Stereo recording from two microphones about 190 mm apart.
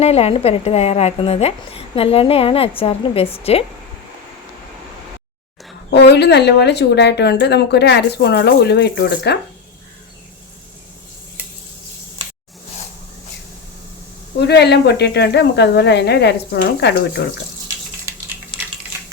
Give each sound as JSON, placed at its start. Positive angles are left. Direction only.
{"t": 0.0, "sound": "a woman's voice", "side_deg": 30}
{"t": 5.9, "sound": "a woman's voice", "side_deg": 60}
{"t": 14.3, "sound": "a woman's voice", "side_deg": 60}
{"t": 18.1, "sound": "a sound", "side_deg": -15}